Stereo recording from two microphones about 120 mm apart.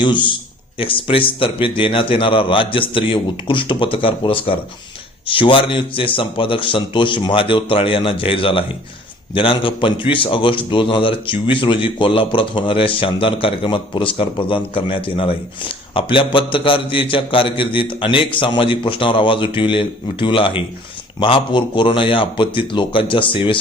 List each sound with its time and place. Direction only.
0.0 s speech: 40° left (ahead or behind)